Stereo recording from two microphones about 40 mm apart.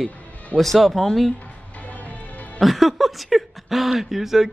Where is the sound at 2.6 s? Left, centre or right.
Centre.